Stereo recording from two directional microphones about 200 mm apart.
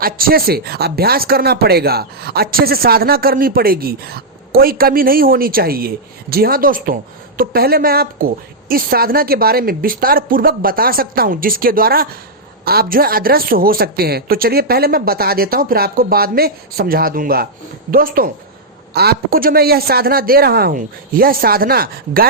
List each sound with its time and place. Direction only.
0.0 s speech: 45° right (ahead or behind)